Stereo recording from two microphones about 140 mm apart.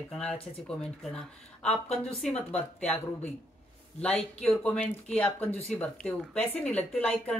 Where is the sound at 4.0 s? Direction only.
5° left (ahead or behind).